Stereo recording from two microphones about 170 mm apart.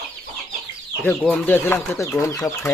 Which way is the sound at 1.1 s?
10° left (ahead or behind).